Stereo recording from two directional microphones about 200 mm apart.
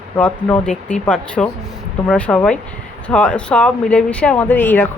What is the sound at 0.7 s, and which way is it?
Speech, 40° left (ahead or behind).